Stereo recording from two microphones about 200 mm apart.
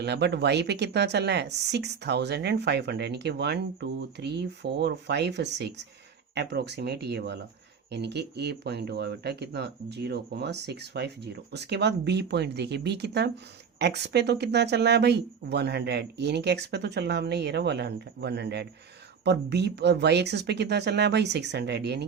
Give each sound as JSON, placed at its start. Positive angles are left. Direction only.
{"t": 0.0, "sound": "speech", "side_deg": -55}